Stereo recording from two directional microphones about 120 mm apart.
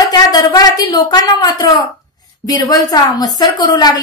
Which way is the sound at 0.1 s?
35° left (ahead or behind).